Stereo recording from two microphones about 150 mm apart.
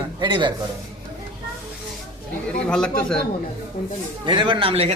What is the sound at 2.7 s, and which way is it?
Speech, 5° left (ahead or behind).